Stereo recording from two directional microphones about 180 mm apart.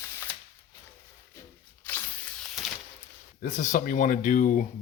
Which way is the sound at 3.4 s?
45° left (ahead or behind).